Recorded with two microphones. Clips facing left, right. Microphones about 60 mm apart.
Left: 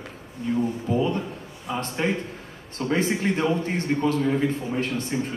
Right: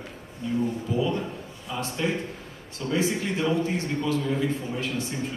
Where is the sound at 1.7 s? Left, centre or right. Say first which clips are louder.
Left 2 dB; left.